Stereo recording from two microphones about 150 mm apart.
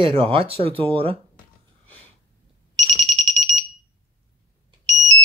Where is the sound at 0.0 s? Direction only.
35° right (ahead or behind).